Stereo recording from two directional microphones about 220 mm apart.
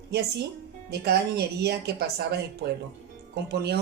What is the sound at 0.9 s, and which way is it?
Speech, 50° right (ahead or behind).